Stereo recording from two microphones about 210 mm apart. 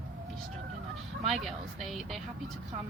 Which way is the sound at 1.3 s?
Centre (ahead or behind).